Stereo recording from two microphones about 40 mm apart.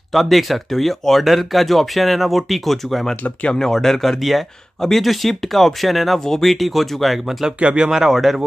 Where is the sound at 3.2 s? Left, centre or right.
Left.